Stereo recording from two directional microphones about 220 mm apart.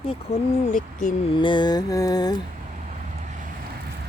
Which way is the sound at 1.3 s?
20° left (ahead or behind).